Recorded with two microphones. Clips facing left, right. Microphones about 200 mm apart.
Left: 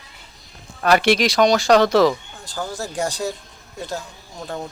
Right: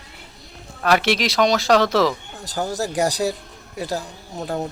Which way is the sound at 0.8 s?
Centre (ahead or behind).